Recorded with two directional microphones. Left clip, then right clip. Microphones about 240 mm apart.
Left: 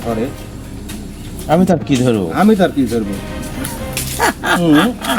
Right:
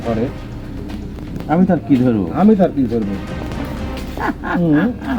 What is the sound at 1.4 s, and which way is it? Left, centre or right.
Speech, left.